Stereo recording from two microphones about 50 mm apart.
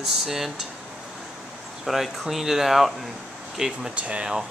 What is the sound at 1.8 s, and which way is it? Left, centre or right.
Speech, centre.